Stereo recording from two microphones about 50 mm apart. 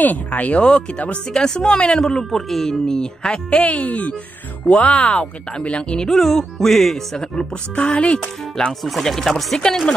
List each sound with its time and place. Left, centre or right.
0.0 s speech: left
6.0 s speech: centre
7.3 s speech: centre
8.8 s speech: centre